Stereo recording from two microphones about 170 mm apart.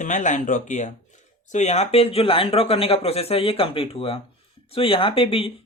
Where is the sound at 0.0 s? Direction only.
50° left (ahead or behind).